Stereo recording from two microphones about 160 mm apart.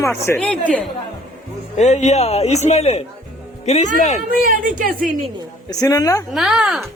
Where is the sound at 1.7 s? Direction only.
45° left (ahead or behind).